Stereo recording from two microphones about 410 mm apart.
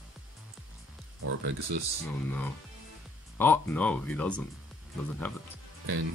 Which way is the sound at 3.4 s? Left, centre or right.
Centre.